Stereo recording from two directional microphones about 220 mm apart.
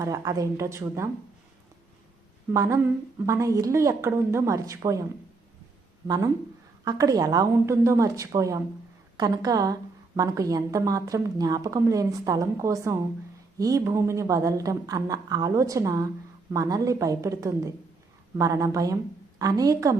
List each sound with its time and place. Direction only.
0.0 s a woman's voice: 15° right (ahead or behind)
2.5 s a woman's voice: 15° right (ahead or behind)
6.1 s a woman's voice: 15° right (ahead or behind)